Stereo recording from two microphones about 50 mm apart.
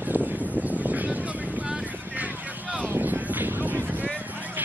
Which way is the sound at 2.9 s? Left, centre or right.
Right.